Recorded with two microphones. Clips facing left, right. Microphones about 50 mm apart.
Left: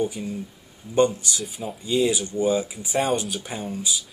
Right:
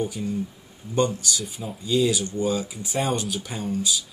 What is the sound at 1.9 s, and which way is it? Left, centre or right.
Speech, left.